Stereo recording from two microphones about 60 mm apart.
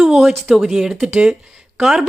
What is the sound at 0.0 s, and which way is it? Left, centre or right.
Speech, centre.